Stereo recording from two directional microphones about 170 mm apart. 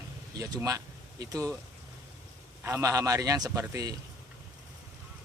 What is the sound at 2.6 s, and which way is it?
Speech, 20° right (ahead or behind).